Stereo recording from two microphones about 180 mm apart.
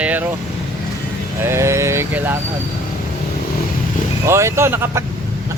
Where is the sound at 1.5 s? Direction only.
15° right (ahead or behind).